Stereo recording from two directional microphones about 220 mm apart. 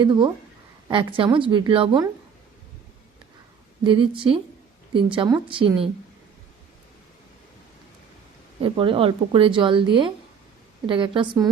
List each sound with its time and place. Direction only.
0.0 s a woman's voice: 20° right (ahead or behind)
3.8 s a woman's voice: 25° right (ahead or behind)
8.6 s a woman's voice: 25° right (ahead or behind)